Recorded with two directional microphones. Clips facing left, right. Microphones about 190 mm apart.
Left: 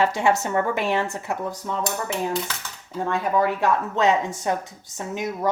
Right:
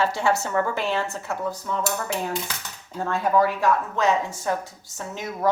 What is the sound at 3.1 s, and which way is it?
A woman's voice, 20° left (ahead or behind).